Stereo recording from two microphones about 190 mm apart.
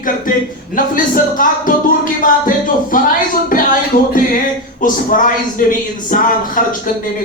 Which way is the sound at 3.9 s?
45° left (ahead or behind).